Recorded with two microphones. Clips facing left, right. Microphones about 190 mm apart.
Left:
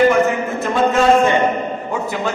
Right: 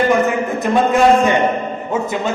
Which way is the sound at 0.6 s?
15° right (ahead or behind).